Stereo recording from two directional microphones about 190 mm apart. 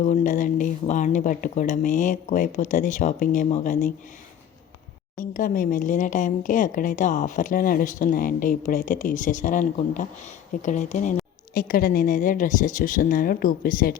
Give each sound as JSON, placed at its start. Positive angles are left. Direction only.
{"t": 0.0, "sound": "a woman's voice", "side_deg": 45}
{"t": 5.3, "sound": "a woman's voice", "side_deg": 45}